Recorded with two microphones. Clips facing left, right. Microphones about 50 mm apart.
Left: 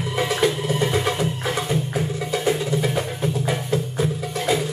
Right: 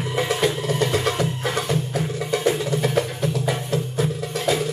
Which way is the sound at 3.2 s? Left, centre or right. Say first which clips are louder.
Even; left.